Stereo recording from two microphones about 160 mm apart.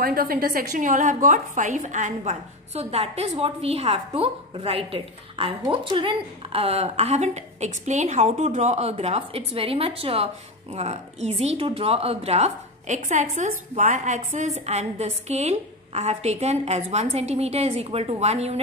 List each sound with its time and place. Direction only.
0.0 s a woman's voice: 65° right (ahead or behind); by 18.6 s 40° right (ahead or behind)